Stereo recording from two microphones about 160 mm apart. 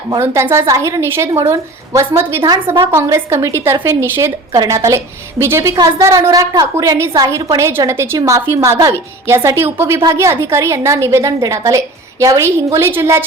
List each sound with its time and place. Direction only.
0.2 s a woman's voice: 15° right (ahead or behind)